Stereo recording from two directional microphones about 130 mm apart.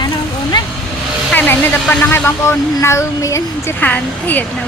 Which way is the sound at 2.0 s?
20° left (ahead or behind).